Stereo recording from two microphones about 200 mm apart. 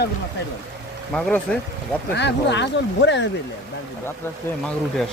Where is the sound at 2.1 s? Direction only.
60° left (ahead or behind).